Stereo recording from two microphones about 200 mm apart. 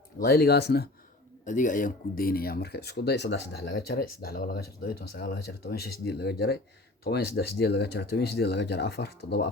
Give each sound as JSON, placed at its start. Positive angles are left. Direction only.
{"t": 0.2, "sound": "speech", "side_deg": 50}
{"t": 1.5, "sound": "speech", "side_deg": 40}